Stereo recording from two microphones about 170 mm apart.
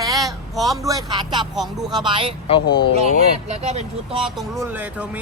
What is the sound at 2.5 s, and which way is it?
Speech, 30° left (ahead or behind).